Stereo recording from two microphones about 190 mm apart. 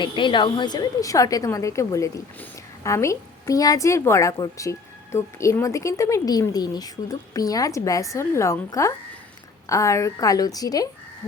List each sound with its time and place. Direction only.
0.0 s a woman's voice: 25° left (ahead or behind)